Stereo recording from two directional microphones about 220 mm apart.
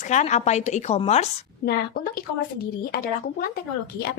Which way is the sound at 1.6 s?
45° left (ahead or behind).